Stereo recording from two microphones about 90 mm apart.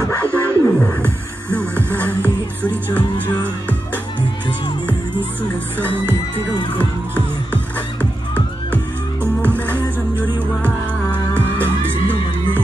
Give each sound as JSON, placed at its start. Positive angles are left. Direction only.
{"t": 0.0, "sound": "music", "side_deg": 20}
{"t": 5.8, "sound": "music", "side_deg": 15}